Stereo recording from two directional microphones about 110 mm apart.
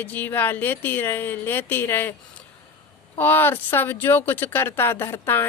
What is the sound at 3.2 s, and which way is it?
A woman's voice, 20° left (ahead or behind).